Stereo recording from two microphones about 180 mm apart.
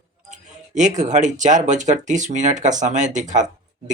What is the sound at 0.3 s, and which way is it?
Speech, 40° right (ahead or behind).